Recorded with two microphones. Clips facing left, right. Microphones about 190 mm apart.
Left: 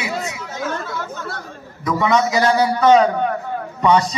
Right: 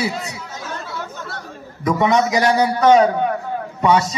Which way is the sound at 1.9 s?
20° right (ahead or behind).